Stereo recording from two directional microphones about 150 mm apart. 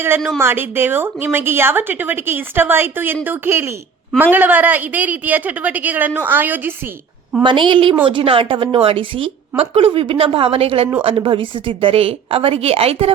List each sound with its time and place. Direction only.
0.3 s a woman's voice: 15° right (ahead or behind)
7.4 s a woman's voice: 35° right (ahead or behind)